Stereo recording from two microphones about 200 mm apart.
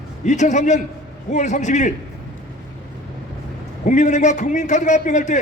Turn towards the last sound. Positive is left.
turn(degrees=35)  # may be behind; listen again after turning